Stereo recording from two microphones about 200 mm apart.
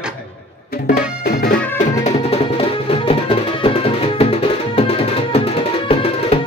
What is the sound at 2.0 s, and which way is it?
Music, 30° left (ahead or behind).